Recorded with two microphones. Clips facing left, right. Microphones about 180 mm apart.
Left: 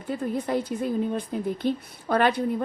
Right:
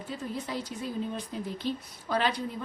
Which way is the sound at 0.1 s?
55° left (ahead or behind).